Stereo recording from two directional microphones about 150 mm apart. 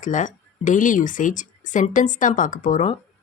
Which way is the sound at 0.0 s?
60° left (ahead or behind).